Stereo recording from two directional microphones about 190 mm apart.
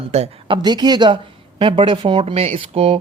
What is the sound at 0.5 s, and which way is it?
Speech, 20° right (ahead or behind).